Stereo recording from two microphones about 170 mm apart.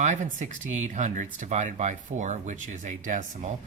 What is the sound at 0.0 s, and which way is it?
Speech, 45° right (ahead or behind).